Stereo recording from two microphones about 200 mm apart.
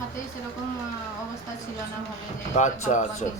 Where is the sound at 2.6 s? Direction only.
35° left (ahead or behind).